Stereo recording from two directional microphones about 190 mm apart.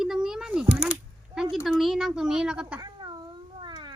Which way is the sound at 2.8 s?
25° right (ahead or behind).